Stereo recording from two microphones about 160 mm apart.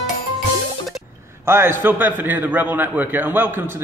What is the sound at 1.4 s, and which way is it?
A man's voice, 15° right (ahead or behind).